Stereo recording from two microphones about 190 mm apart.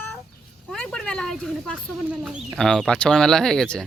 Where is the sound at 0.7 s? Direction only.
5° left (ahead or behind).